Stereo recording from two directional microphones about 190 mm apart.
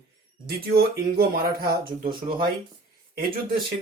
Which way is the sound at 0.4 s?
55° right (ahead or behind).